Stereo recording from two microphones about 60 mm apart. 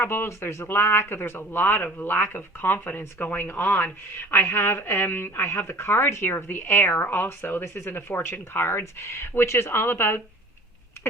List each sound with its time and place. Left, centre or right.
0.0 s speech: left
8.8 s speech: left